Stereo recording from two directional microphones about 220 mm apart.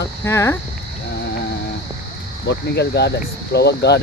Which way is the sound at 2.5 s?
50° left (ahead or behind).